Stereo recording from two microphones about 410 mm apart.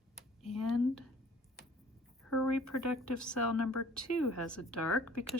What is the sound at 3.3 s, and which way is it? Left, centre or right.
Speech, left.